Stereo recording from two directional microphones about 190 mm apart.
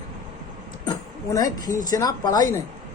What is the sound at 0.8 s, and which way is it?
Speech, 20° left (ahead or behind).